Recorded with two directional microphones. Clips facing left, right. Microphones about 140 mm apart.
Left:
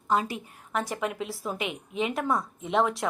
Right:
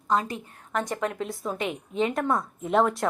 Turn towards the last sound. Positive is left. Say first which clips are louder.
# right 3 dB
turn(degrees=0)  # may be behind; listen again after turning